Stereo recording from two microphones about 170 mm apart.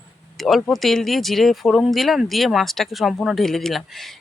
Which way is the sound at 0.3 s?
Centre (ahead or behind).